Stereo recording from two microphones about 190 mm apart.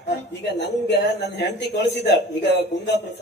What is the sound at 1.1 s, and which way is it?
Speech, 60° left (ahead or behind).